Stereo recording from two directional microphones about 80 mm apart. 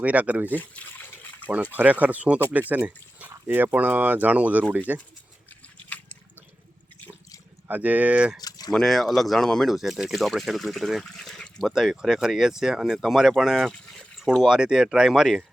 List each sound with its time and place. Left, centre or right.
0.0 s speech: centre
1.7 s speech: centre
7.7 s speech: centre
8.4 s a sound: left
8.7 s speech: centre
11.6 s speech: centre
13.7 s a sound: centre
14.4 s speech: centre